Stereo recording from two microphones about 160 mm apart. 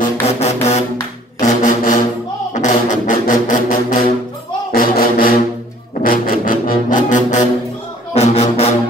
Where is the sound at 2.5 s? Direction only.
50° left (ahead or behind).